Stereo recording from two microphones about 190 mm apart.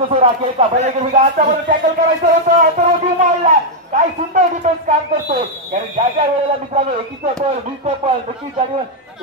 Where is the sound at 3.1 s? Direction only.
40° right (ahead or behind).